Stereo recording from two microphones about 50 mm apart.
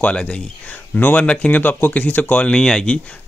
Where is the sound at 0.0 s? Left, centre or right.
Left.